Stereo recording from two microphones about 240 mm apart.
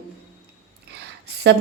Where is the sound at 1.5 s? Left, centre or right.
Right.